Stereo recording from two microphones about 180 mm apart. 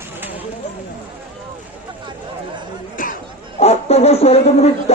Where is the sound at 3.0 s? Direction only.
45° left (ahead or behind).